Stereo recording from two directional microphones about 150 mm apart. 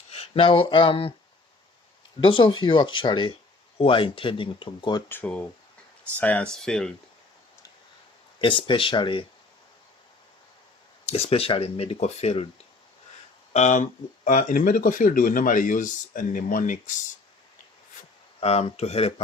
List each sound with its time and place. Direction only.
0.1 s speech: 40° left (ahead or behind)
2.2 s speech: 35° left (ahead or behind)
5.0 s speech: 10° left (ahead or behind)
8.4 s speech: 35° left (ahead or behind)
11.0 s speech: 40° left (ahead or behind)
13.5 s speech: 50° left (ahead or behind)
14.3 s a man's voice: 65° left (ahead or behind)
18.0 s a sound: 55° left (ahead or behind)
18.3 s speech: 45° left (ahead or behind)